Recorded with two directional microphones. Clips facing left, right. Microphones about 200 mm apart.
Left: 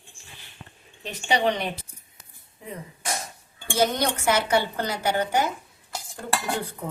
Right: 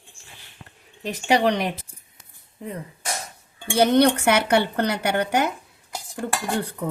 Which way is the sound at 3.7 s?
65° right (ahead or behind).